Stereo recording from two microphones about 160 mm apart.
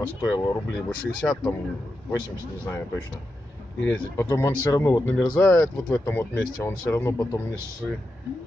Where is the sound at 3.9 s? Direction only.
20° left (ahead or behind).